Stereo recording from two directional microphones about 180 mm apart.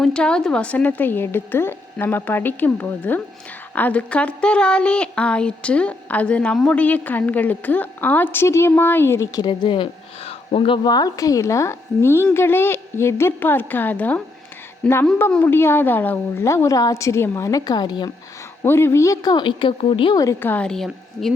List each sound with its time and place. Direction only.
0.0 s speech: 5° left (ahead or behind); by 18.1 s 25° left (ahead or behind)
18.6 s speech: 15° left (ahead or behind)